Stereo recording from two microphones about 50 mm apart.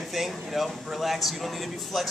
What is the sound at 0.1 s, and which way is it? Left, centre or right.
Speech, centre.